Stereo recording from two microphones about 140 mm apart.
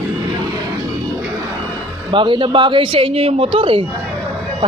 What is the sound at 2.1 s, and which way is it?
Speech, 35° right (ahead or behind).